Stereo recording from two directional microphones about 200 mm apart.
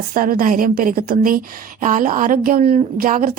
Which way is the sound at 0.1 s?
45° right (ahead or behind).